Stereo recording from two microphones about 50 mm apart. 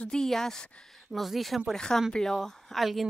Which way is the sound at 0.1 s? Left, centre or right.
Centre.